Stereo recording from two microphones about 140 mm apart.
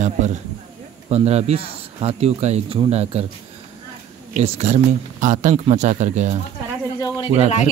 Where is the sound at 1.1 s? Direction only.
50° right (ahead or behind).